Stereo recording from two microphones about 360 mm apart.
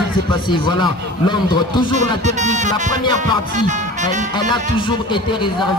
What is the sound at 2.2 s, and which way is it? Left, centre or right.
Speech, centre.